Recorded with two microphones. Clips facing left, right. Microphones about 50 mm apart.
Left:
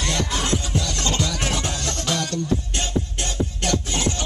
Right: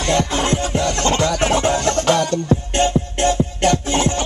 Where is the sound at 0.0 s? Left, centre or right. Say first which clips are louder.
Right 7 dB; right.